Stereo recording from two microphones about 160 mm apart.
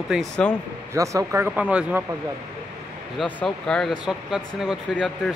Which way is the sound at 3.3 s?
5° left (ahead or behind).